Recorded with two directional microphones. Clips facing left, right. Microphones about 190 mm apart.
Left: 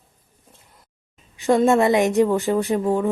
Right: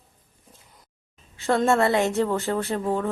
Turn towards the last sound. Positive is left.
turn(degrees=15)  # may be behind; listen again after turning